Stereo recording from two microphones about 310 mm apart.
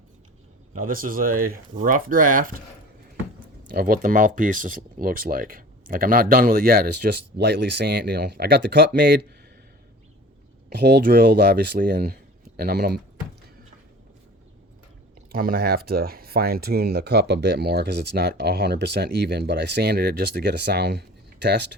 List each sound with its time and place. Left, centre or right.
0.7 s speech: right
3.8 s speech: right
10.7 s speech: right
15.3 s speech: right